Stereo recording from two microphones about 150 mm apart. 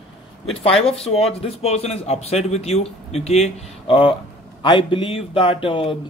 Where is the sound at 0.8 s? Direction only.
40° left (ahead or behind).